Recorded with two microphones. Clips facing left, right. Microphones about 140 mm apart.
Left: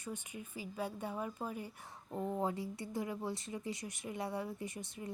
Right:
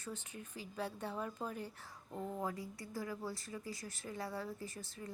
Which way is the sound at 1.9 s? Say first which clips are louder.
Left 8 dB; 25° left (ahead or behind).